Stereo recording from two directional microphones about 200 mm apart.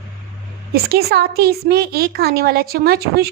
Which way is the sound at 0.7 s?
50° right (ahead or behind).